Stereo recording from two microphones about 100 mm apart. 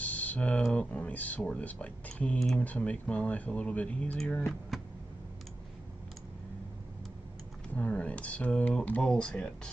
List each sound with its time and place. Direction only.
0.0 s typing: 15° left (ahead or behind)
0.7 s speech: 10° left (ahead or behind)
4.5 s speech: centre (ahead or behind)
7.7 s speech: 15° left (ahead or behind)